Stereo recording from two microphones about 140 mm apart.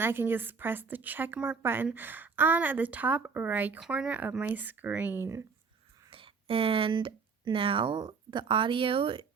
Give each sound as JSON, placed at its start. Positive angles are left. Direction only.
{"t": 0.0, "sound": "a woman's voice", "side_deg": -15}
{"t": 6.1, "sound": "speech", "side_deg": -40}